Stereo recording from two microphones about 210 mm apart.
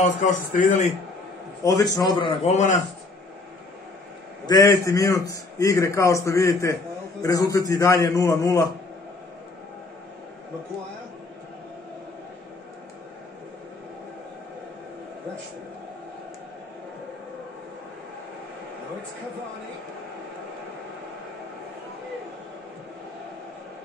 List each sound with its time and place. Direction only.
0.0 s speech: 35° left (ahead or behind)
1.6 s a man's voice: 15° left (ahead or behind); by 2.8 s 35° left (ahead or behind)
4.5 s a man's voice: 15° left (ahead or behind)